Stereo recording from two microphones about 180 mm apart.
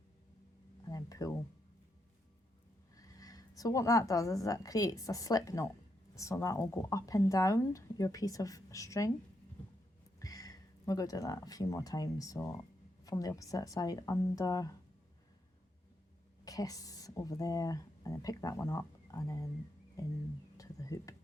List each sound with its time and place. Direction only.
0.9 s speech: 20° left (ahead or behind)
2.9 s a woman's voice: 20° left (ahead or behind)
10.2 s speech: 20° left (ahead or behind)
16.4 s speech: 20° left (ahead or behind)
20.0 s music: 20° left (ahead or behind)